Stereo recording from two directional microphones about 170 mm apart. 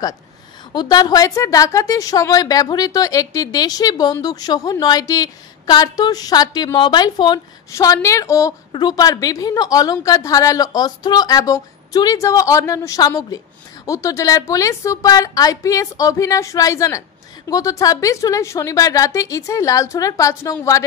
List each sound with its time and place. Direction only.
0.7 s a woman's voice: 25° left (ahead or behind)